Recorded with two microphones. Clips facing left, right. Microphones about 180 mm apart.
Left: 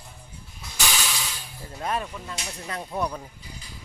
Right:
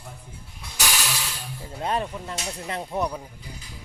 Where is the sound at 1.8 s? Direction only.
30° right (ahead or behind).